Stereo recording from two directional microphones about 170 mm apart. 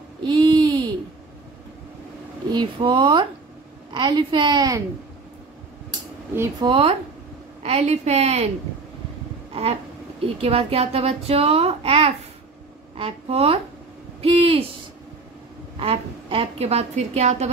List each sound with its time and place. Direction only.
0.2 s a sound: 30° right (ahead or behind)
2.5 s a woman's voice: 30° right (ahead or behind)
6.6 s a child's voice: 30° right (ahead or behind)
9.5 s a sound: 35° right (ahead or behind)
10.2 s a child's voice: 35° right (ahead or behind)
15.8 s a child's voice: 35° right (ahead or behind)